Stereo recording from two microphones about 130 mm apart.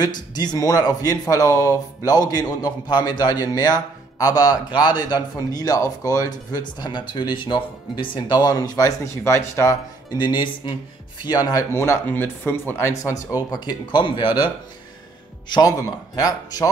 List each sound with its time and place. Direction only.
0.0 s speech: 35° left (ahead or behind)
10.1 s speech: 35° left (ahead or behind)
11.7 s speech: 20° left (ahead or behind); by 14.5 s 40° left (ahead or behind)
16.2 s speech: 30° left (ahead or behind)